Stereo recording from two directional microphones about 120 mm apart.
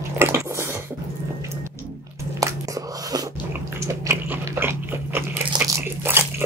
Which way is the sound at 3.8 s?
25° right (ahead or behind).